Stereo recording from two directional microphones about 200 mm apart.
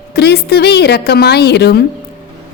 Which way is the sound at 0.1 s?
55° left (ahead or behind).